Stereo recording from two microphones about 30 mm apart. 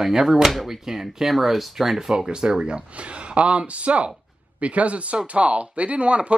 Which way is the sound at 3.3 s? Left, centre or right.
Right.